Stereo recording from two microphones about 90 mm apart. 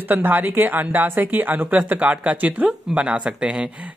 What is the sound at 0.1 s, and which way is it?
A woman's voice, 20° right (ahead or behind).